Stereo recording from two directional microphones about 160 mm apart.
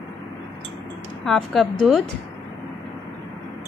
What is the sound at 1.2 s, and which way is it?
Speech, centre (ahead or behind).